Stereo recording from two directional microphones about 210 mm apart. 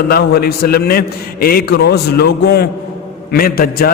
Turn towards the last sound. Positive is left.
turn(degrees=45)  # may be behind; listen again after turning